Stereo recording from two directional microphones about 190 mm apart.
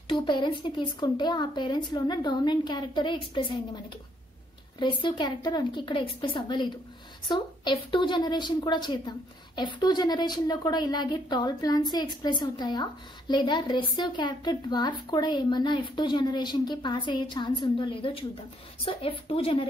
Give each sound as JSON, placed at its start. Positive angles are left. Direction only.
{"t": 0.1, "sound": "a woman's voice", "side_deg": 25}
{"t": 5.0, "sound": "a woman's voice", "side_deg": 25}